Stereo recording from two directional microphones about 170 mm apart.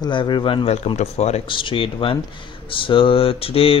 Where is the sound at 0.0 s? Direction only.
25° left (ahead or behind).